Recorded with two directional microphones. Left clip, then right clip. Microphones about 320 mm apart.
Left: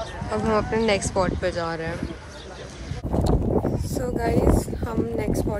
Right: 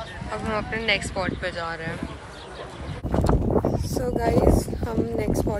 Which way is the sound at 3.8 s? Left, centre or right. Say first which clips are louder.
Right 1 dB; centre.